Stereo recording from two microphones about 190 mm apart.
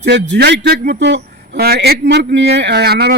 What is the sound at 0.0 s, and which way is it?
A man's voice, 65° right (ahead or behind).